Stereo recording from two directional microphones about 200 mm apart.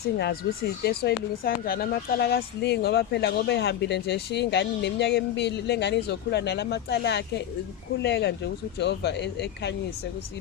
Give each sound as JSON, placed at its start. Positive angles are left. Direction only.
{"t": 0.9, "sound": "speech", "side_deg": 50}